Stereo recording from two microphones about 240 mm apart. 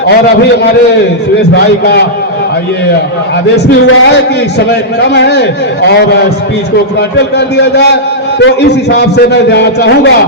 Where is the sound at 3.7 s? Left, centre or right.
Left.